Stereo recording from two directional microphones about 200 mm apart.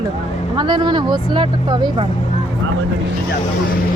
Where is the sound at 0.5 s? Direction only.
20° right (ahead or behind).